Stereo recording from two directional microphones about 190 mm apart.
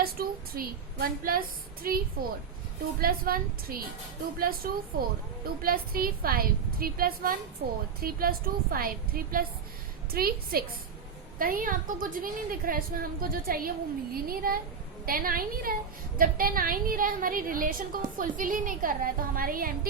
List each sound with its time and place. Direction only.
0.0 s a woman's voice: 50° right (ahead or behind)